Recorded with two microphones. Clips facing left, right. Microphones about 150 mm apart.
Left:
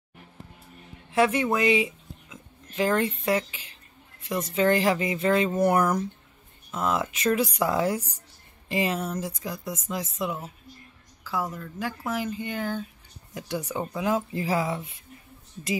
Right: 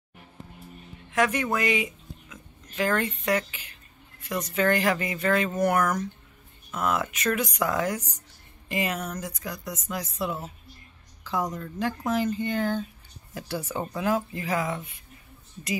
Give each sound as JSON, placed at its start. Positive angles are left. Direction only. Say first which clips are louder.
{"t": 1.1, "sound": "speech", "louder": "left 2 dB", "side_deg": 25}
{"t": 10.2, "sound": "speech", "louder": "even", "side_deg": 15}